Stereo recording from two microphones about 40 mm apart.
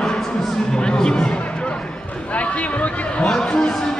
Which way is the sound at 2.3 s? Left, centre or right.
Left.